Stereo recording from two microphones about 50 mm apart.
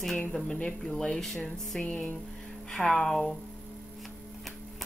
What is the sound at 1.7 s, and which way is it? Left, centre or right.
Speech, centre.